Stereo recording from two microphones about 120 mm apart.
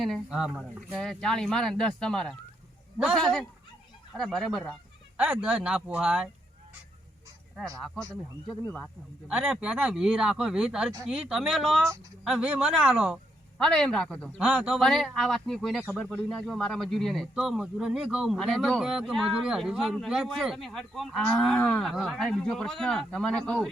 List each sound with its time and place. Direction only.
0.3 s speech: 10° right (ahead or behind)
5.1 s speech: 10° right (ahead or behind)
9.2 s speech: 10° right (ahead or behind)
13.6 s a man's voice: 5° left (ahead or behind)
14.3 s speech: 10° right (ahead or behind)